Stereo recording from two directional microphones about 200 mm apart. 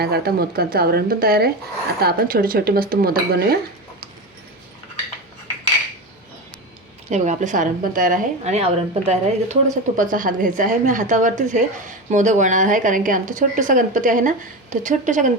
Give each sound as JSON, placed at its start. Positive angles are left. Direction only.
{"t": 0.0, "sound": "speech", "side_deg": -50}
{"t": 7.1, "sound": "a woman's voice", "side_deg": -35}
{"t": 10.0, "sound": "a woman's voice", "side_deg": -40}